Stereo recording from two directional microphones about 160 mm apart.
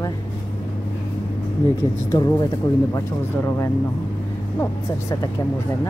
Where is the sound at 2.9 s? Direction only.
15° left (ahead or behind).